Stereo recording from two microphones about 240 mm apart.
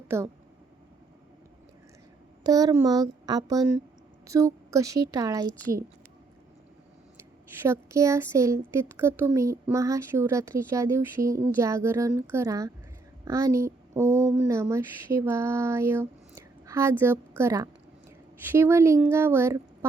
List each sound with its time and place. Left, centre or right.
0.1 s speech: centre
2.4 s speech: centre
7.5 s speech: centre
14.3 s a sound: centre
17.0 s speech: centre